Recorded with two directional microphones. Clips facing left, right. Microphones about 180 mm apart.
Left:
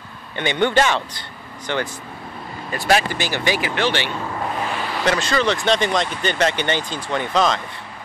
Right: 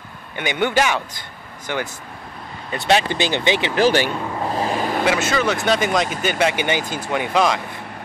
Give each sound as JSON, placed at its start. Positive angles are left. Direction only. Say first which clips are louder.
{"t": 0.4, "sound": "a man's voice", "louder": "left 1 dB", "side_deg": -10}
{"t": 2.7, "sound": "speech", "louder": "right 1 dB", "side_deg": -25}
{"t": 3.7, "sound": "speech", "louder": "right 5 dB", "side_deg": -40}
{"t": 4.5, "sound": "vehicle", "louder": "right 7 dB", "side_deg": -35}
{"t": 5.0, "sound": "a man's voice", "louder": "left 2 dB", "side_deg": -5}